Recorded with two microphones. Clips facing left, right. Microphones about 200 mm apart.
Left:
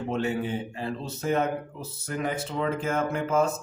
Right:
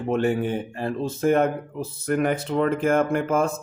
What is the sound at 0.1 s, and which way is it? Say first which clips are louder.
Speech: right 6 dB; 55° right (ahead or behind).